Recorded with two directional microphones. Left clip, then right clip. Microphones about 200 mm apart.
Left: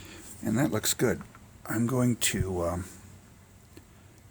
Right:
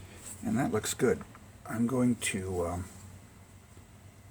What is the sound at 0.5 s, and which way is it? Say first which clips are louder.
Speech: left 3 dB; 45° left (ahead or behind).